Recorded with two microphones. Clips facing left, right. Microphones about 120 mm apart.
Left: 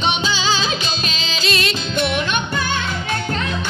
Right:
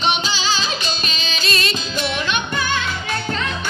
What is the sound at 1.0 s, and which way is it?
Music, 90° left.